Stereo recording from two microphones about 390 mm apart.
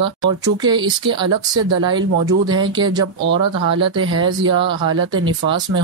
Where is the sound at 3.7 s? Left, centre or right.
Right.